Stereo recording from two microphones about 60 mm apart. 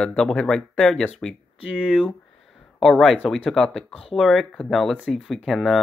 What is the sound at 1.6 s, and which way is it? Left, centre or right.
Speech, centre.